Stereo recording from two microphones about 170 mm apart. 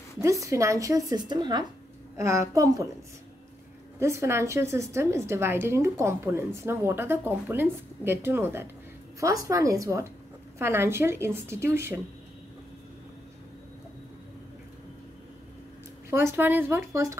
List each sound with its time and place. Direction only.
0.2 s a woman's voice: 20° right (ahead or behind)
4.0 s a woman's voice: 15° right (ahead or behind)
16.3 s a woman's voice: 10° right (ahead or behind)